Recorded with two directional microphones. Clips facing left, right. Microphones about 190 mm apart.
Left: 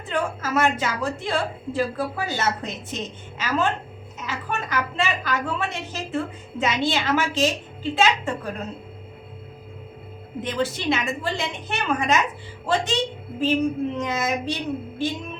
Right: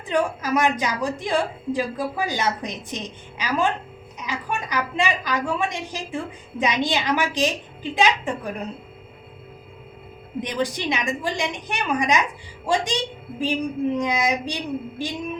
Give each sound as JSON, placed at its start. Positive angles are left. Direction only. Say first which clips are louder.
{"t": 0.1, "sound": "a woman's voice", "louder": "right 3 dB", "side_deg": -15}
{"t": 10.4, "sound": "a woman's voice", "louder": "left 1 dB", "side_deg": -15}